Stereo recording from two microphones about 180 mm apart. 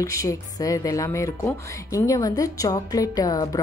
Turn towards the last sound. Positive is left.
turn(degrees=20)  # may be behind; listen again after turning